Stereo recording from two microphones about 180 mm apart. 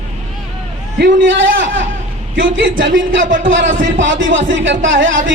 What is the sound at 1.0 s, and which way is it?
Speech, 90° right.